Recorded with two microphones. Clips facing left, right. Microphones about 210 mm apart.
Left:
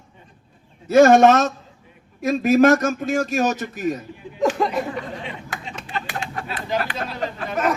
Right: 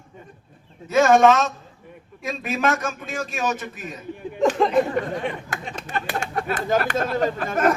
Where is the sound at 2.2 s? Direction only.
40° left (ahead or behind).